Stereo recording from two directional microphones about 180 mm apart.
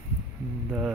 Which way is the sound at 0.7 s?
5° right (ahead or behind).